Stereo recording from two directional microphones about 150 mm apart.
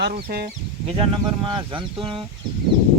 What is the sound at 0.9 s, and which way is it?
Speech, 35° right (ahead or behind).